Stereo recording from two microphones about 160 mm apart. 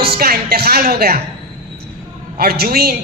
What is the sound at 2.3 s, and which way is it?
Speech, 75° right (ahead or behind).